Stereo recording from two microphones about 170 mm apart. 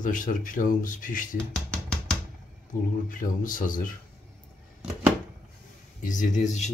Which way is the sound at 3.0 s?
50° left (ahead or behind).